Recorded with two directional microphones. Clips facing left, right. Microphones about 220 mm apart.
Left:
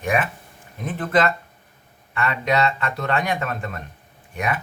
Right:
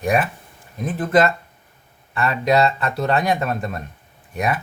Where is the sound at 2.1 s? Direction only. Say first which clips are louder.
Right 4 dB; 35° right (ahead or behind).